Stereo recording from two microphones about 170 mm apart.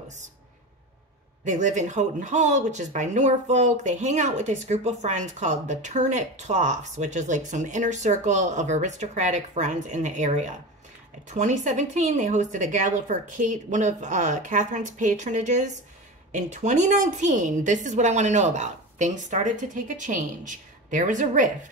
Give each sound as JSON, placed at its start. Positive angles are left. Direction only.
{"t": 1.4, "sound": "speech", "side_deg": -45}